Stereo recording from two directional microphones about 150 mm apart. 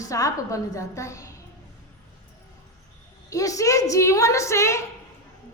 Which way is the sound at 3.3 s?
20° left (ahead or behind).